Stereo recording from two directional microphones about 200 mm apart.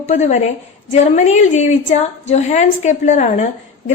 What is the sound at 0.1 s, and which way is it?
A woman's voice, 35° left (ahead or behind).